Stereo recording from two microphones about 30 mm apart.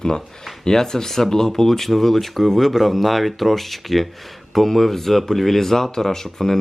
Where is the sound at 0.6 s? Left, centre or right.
Centre.